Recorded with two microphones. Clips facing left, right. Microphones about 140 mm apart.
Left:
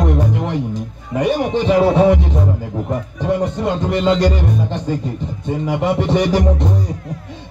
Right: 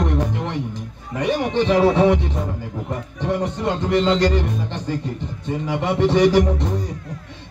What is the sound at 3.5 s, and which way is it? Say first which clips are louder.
Speech: left 1 dB; 25° left (ahead or behind).